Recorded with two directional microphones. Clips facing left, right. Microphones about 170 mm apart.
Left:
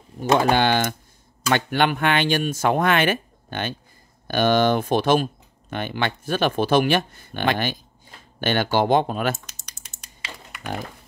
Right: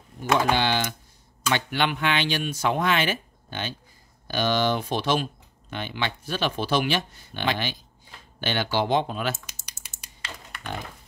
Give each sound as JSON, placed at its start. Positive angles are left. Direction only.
{"t": 0.2, "sound": "speech", "side_deg": 50}
{"t": 9.5, "sound": "typing", "side_deg": -10}